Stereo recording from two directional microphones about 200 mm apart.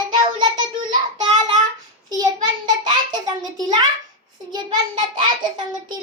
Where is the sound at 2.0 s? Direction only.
20° right (ahead or behind).